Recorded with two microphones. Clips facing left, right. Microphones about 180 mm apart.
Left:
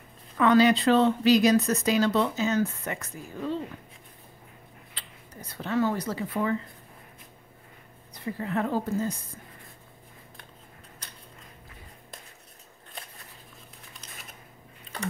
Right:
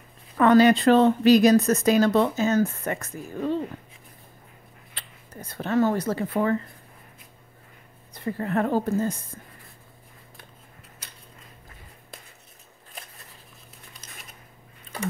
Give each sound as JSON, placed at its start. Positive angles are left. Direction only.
{"t": 0.4, "sound": "a woman's voice", "side_deg": -50}
{"t": 4.9, "sound": "speech", "side_deg": -50}
{"t": 8.1, "sound": "a woman's voice", "side_deg": -50}